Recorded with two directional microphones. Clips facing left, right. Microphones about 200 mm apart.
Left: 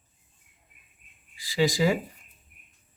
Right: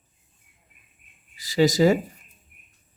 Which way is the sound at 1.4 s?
45° right (ahead or behind).